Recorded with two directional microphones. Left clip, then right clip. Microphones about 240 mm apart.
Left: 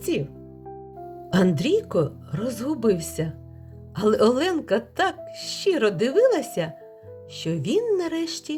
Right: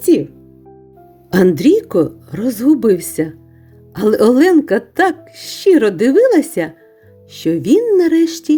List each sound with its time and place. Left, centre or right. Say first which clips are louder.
0.1 s a woman's voice: right 11 dB; right
1.3 s a woman's voice: right 11 dB; right